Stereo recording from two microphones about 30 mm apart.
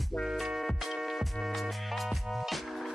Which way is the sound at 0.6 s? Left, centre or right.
Centre.